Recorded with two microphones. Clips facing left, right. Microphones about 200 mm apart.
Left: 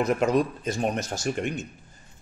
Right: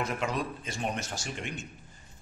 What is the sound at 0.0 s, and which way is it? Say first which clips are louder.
Speech: left 9 dB; 40° left (ahead or behind).